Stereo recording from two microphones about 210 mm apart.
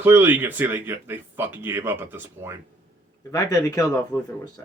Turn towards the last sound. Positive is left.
turn(degrees=15)  # may be behind; listen again after turning